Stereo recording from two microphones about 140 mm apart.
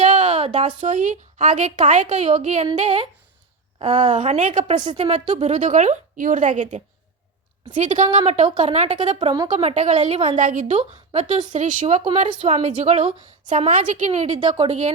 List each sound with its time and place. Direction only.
0.0 s a sound: 50° right (ahead or behind)
0.8 s a woman's voice: 60° right (ahead or behind)
4.9 s a woman's voice: 50° right (ahead or behind)
8.2 s a woman's voice: 40° right (ahead or behind)
9.1 s speech: 35° right (ahead or behind)
9.5 s a woman's voice: 50° right (ahead or behind)
10.3 s a woman's voice: 65° right (ahead or behind); by 13.7 s 50° right (ahead or behind)
13.7 s a woman's voice: 60° right (ahead or behind)
14.3 s a woman's voice: 30° right (ahead or behind)
14.6 s a woman's voice: 50° right (ahead or behind)